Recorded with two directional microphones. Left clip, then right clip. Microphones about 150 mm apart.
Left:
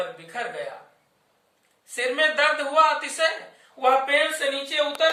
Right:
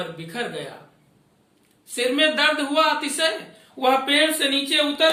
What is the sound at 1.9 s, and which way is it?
Speech, 20° left (ahead or behind).